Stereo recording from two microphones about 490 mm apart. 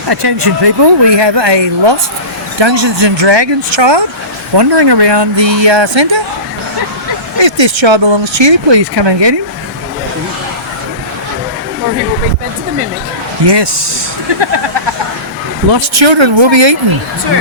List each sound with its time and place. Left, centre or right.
0.1 s speech: right
7.3 s speech: right
13.4 s speech: right
15.7 s speech: right